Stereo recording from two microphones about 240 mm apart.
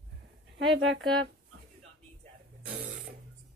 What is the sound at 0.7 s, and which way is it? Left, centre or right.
Speech, right.